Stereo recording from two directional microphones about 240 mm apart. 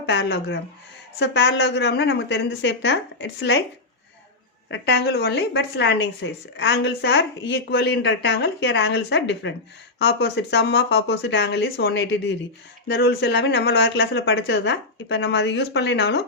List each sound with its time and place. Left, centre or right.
0.0 s a woman's voice: left
4.7 s a woman's voice: left